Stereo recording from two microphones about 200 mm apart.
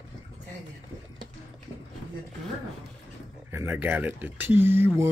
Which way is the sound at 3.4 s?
15° right (ahead or behind).